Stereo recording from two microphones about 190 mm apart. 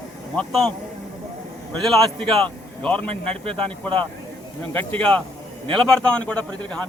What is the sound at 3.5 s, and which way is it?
Speech, 30° right (ahead or behind).